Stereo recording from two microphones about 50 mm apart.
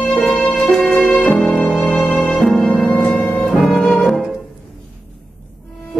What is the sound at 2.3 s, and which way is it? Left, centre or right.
Music, centre.